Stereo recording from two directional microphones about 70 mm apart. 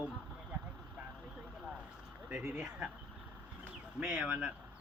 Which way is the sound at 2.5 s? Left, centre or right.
Right.